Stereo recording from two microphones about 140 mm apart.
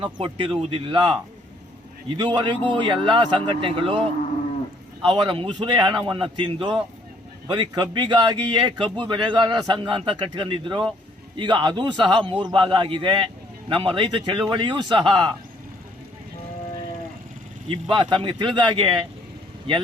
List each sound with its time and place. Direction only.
0.0 s a man's voice: 40° right (ahead or behind)
17.7 s a man's voice: 35° right (ahead or behind)